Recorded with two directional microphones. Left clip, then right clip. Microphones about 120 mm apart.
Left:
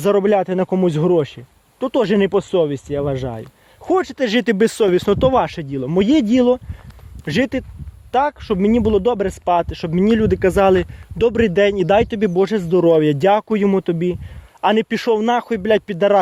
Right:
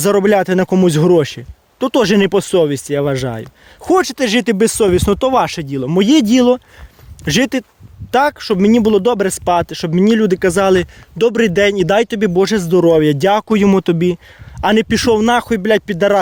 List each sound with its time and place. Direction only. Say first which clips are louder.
0.0 s speech: right 3 dB; 40° right (ahead or behind)
0.5 s speech: right 5 dB; 65° right (ahead or behind); by 4.2 s 45° right (ahead or behind)
4.2 s speech: right 2 dB; 20° right (ahead or behind); by 7.6 s 40° right (ahead or behind)
8.1 s speech: right 4 dB; 55° right (ahead or behind); by 12.1 s 20° right (ahead or behind)
12.1 s speech: right 3 dB; 40° right (ahead or behind); by 13.4 s 20° right (ahead or behind)
13.5 s speech: right 4 dB; 60° right (ahead or behind)
14.6 s speech: right 3 dB; 30° right (ahead or behind)
15.1 s speech: right 3 dB; 40° right (ahead or behind)